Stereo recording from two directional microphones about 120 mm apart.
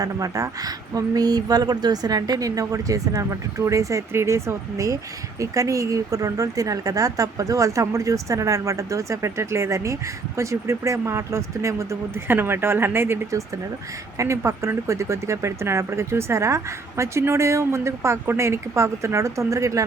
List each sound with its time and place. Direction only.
0.0 s speech: 30° right (ahead or behind)